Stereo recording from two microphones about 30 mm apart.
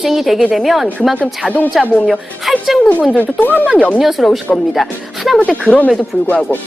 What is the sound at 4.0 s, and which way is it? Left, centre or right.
Speech, centre.